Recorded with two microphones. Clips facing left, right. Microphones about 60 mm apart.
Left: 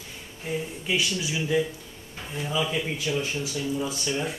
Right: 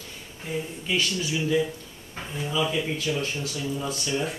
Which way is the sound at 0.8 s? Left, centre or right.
Centre.